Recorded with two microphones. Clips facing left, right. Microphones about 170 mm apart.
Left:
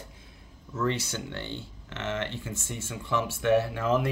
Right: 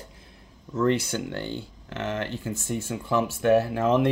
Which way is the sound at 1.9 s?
40° right (ahead or behind).